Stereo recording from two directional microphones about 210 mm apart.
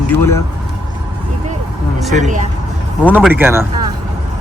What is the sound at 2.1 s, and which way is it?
Speech, 35° right (ahead or behind).